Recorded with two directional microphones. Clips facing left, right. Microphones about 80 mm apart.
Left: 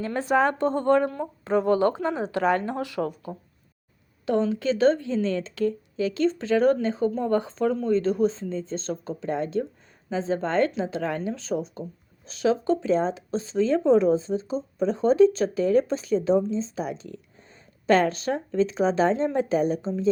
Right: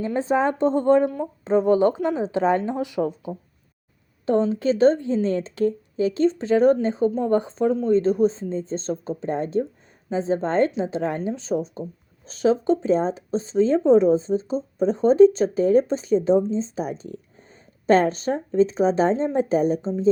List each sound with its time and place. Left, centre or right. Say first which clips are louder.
0.0 s speech: right 1 dB; right
4.3 s speech: right 3 dB; right